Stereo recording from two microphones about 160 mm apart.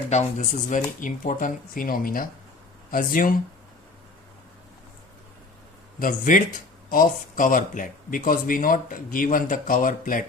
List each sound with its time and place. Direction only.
0.1 s speech: 45° left (ahead or behind)
6.0 s speech: 55° left (ahead or behind)